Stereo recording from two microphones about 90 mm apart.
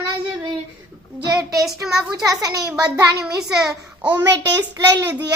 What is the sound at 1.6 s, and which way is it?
Speech, 5° right (ahead or behind).